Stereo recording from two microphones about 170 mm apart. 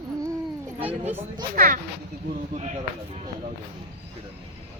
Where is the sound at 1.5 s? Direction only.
50° right (ahead or behind).